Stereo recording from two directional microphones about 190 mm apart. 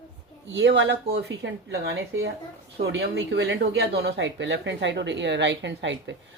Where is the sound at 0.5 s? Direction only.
65° right (ahead or behind).